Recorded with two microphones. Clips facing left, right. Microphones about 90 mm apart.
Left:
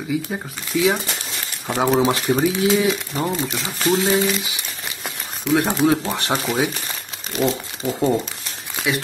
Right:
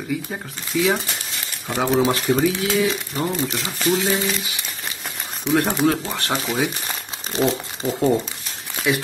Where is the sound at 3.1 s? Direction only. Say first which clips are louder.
Even; 10° left (ahead or behind).